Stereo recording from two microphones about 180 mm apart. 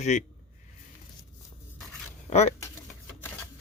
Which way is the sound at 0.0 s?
40° left (ahead or behind).